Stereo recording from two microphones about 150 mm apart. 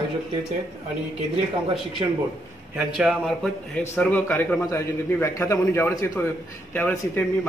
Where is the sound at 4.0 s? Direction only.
10° left (ahead or behind).